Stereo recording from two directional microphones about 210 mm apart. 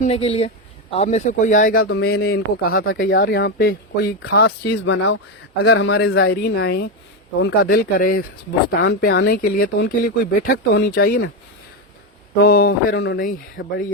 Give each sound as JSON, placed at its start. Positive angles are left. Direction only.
{"t": 0.0, "sound": "speech", "side_deg": 30}
{"t": 12.4, "sound": "speech", "side_deg": 45}